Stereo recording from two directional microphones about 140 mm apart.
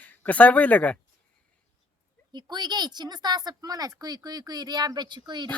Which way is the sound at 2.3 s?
30° right (ahead or behind).